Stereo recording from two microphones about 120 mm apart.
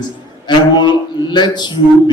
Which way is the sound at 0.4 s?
35° left (ahead or behind).